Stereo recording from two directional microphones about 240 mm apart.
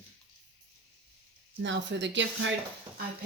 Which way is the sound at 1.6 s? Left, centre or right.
Right.